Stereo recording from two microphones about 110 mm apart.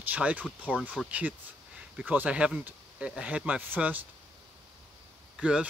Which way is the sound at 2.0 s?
15° right (ahead or behind).